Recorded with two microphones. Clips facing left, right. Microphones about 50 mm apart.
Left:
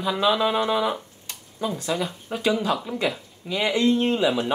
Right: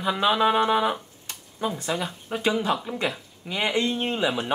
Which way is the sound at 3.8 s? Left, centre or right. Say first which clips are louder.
Left 5 dB; centre.